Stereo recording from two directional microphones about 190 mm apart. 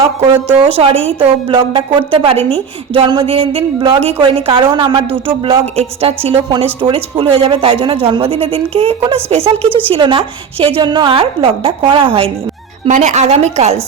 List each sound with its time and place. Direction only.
0.3 s a woman's voice: 10° right (ahead or behind)
0.6 s a woman's voice: 30° right (ahead or behind)